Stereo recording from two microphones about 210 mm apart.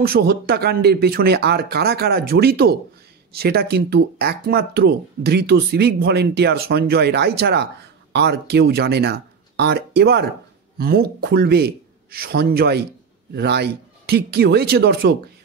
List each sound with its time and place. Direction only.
0.0 s speech: 45° right (ahead or behind)